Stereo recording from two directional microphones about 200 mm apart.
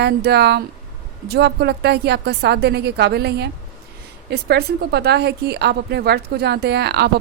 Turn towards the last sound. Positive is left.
turn(degrees=-55)  # may be behind; listen again after turning